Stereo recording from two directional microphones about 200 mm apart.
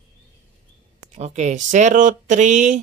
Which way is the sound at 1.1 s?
35° right (ahead or behind).